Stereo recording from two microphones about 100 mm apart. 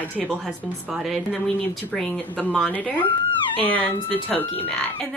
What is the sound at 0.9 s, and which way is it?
Speech, centre (ahead or behind).